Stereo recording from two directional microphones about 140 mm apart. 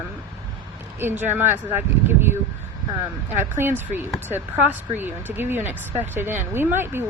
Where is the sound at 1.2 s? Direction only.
15° right (ahead or behind).